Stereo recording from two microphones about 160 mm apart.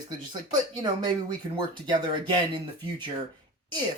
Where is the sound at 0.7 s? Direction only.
25° right (ahead or behind).